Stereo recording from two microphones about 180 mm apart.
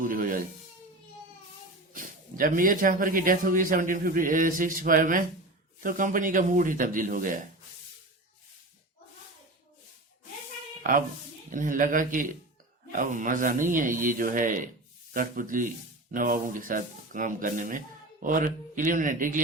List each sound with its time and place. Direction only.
0.0 s music: 50° right (ahead or behind)
1.9 s a man's voice: 50° right (ahead or behind)
11.5 s a man's voice: 45° right (ahead or behind)